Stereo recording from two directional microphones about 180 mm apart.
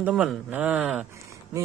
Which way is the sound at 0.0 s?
5° right (ahead or behind).